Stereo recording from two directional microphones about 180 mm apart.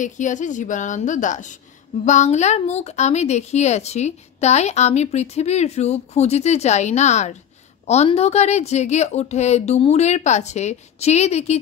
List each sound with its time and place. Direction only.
0.0 s a woman's voice: 45° left (ahead or behind)